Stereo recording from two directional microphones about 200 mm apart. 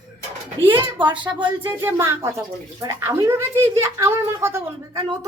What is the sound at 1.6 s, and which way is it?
Speech, 15° right (ahead or behind).